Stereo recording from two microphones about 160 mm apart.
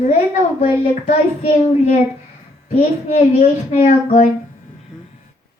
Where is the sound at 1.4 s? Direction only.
40° left (ahead or behind).